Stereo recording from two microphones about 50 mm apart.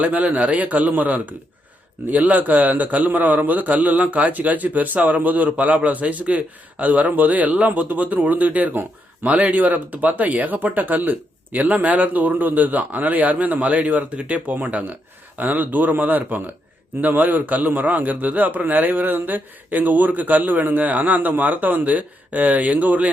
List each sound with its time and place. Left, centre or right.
0.0 s a man's voice: right